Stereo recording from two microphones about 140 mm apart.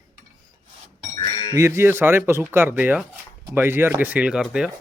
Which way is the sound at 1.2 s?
35° left (ahead or behind).